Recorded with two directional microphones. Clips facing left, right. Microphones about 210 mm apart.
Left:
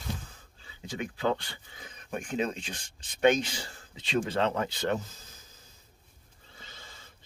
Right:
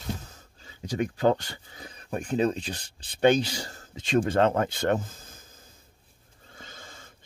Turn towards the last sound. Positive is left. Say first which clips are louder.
# right 4 dB
turn(degrees=-50)  # may be behind; listen again after turning